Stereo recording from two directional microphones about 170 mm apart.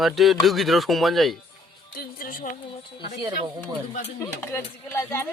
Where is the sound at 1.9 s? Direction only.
60° left (ahead or behind).